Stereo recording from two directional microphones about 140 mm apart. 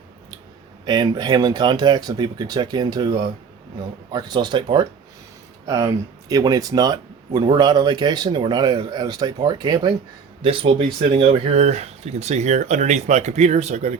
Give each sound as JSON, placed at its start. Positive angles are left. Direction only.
{"t": 0.9, "sound": "speech", "side_deg": -30}
{"t": 5.6, "sound": "speech", "side_deg": -25}
{"t": 10.4, "sound": "speech", "side_deg": -40}